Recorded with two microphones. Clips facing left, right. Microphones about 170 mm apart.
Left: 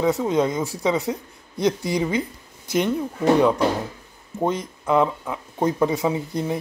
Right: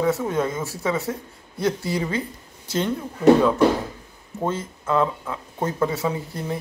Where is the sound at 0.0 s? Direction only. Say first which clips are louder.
Left 2 dB; 15° left (ahead or behind).